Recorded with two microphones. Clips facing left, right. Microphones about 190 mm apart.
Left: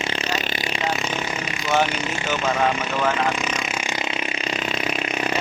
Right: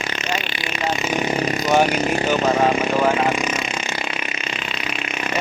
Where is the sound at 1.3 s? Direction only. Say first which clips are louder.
Right 8 dB; 35° right (ahead or behind).